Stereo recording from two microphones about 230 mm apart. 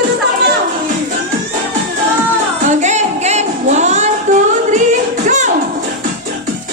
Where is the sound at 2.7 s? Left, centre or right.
Right.